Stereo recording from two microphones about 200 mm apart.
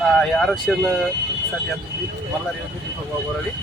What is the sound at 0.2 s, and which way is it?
Speech, centre (ahead or behind).